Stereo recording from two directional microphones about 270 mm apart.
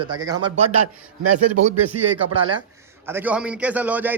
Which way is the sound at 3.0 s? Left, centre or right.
Centre.